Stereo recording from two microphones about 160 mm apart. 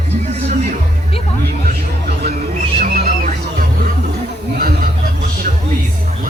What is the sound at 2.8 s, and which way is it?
Music, 65° right (ahead or behind).